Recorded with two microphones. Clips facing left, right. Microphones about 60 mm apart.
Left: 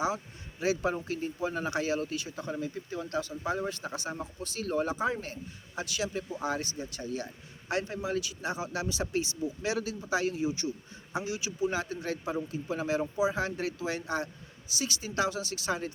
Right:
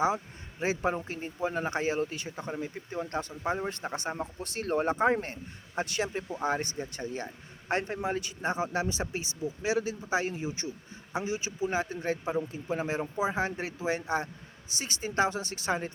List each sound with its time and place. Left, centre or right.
0.9 s speech: right